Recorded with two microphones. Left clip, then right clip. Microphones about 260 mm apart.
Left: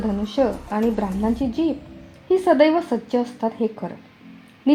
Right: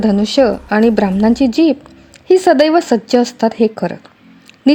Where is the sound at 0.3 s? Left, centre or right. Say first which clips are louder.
Right 9 dB; right.